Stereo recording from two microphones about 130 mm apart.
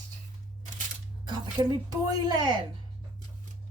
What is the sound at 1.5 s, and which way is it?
A woman's voice, 35° right (ahead or behind).